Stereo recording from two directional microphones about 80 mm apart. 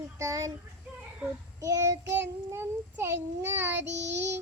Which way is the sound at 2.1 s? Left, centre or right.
Right.